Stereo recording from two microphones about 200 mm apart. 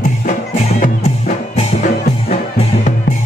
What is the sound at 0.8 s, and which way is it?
Music, 40° left (ahead or behind).